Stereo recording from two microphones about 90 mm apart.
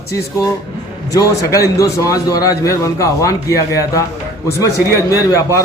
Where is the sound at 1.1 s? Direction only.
40° left (ahead or behind).